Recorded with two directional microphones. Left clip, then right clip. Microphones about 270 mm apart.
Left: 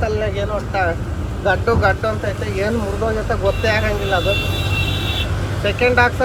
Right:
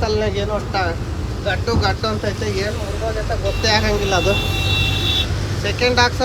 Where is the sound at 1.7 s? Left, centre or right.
Centre.